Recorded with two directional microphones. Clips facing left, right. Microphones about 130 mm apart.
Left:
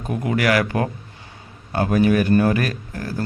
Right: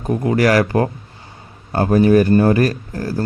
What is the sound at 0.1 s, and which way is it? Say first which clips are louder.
Speech: right 5 dB; 35° right (ahead or behind).